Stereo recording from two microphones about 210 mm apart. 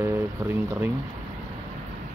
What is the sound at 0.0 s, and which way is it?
Speech, 10° right (ahead or behind).